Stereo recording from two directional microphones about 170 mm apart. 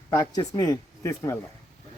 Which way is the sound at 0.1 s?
20° left (ahead or behind).